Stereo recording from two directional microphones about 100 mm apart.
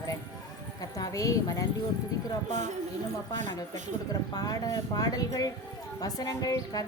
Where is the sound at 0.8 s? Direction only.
35° left (ahead or behind).